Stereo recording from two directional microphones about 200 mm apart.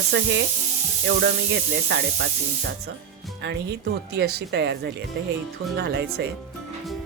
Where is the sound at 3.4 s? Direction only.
60° right (ahead or behind).